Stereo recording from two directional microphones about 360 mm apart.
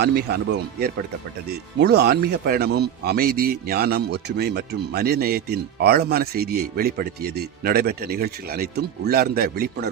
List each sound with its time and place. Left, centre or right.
0.0 s speech: right